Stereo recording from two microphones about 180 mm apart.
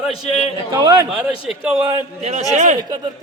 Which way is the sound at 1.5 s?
10° right (ahead or behind).